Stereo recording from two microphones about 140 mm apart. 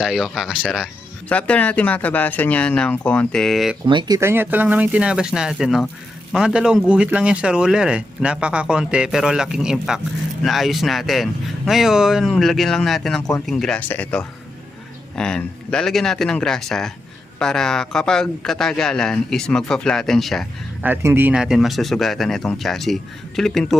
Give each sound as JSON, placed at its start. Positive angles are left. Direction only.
{"t": 0.0, "sound": "speech", "side_deg": -5}
{"t": 1.3, "sound": "speech", "side_deg": 10}
{"t": 3.8, "sound": "speech", "side_deg": -35}
{"t": 4.2, "sound": "speech", "side_deg": -15}
{"t": 13.7, "sound": "speech", "side_deg": 15}
{"t": 20.8, "sound": "speech", "side_deg": -15}